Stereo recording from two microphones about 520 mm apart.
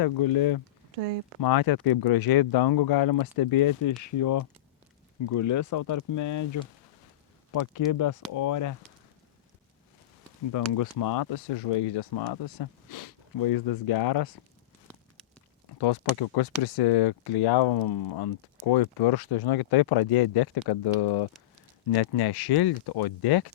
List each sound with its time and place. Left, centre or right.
0.0 s speech: left
10.7 s speech: left
14.8 s a sound: centre
15.8 s speech: left